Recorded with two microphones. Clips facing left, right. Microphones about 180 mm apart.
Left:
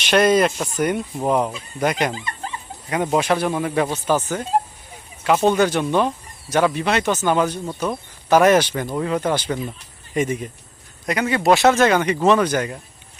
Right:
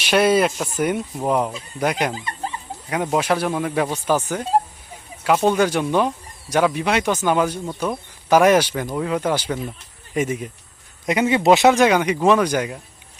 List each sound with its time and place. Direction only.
0.0 s speech: 5° right (ahead or behind)
5.5 s speech: 10° right (ahead or behind)
7.6 s speech: 5° left (ahead or behind)
8.3 s speech: 10° right (ahead or behind)
11.0 s speech: 20° right (ahead or behind)